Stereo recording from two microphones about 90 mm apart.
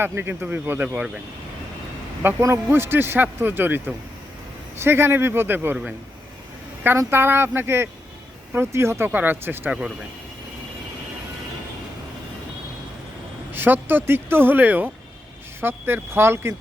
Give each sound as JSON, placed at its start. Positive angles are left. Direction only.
{"t": 0.0, "sound": "a man's voice", "side_deg": -25}
{"t": 2.4, "sound": "a man's voice", "side_deg": -30}
{"t": 6.8, "sound": "a man's voice", "side_deg": -25}
{"t": 13.5, "sound": "a man's voice", "side_deg": -25}